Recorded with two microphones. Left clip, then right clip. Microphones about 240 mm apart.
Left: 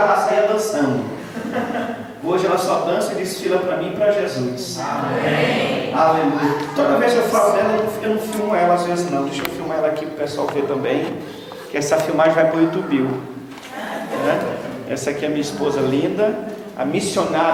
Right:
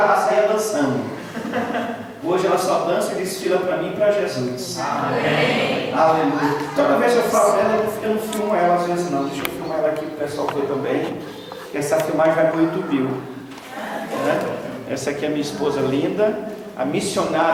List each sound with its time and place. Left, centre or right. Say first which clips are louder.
0.0 s a sound: left 1 dB; centre
2.3 s speech: left 1 dB; centre
10.3 s a man's voice: left 2 dB; left
11.7 s speech: left 2 dB; centre
14.2 s speech: left 1 dB; centre
15.0 s speech: left 1 dB; centre